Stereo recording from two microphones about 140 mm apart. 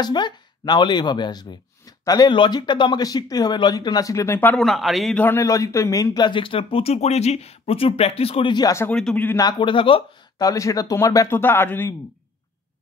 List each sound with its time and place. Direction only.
0.0 s speech: 30° left (ahead or behind)
4.6 s speech: centre (ahead or behind)
5.2 s speech: 20° left (ahead or behind)
8.9 s speech: 10° left (ahead or behind)
9.4 s speech: 30° left (ahead or behind)
10.4 s speech: 25° left (ahead or behind)